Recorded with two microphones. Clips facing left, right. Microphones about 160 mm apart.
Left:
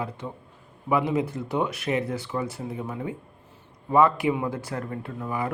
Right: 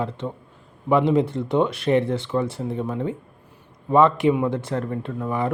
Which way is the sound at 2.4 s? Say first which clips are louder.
Right 5 dB; 25° right (ahead or behind).